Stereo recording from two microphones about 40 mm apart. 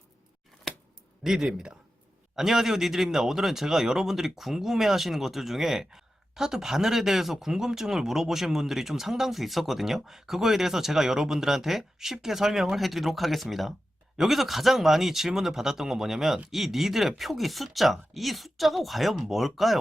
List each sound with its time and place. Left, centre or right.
1.2 s speech: centre
1.5 s speech: right
2.3 s speech: centre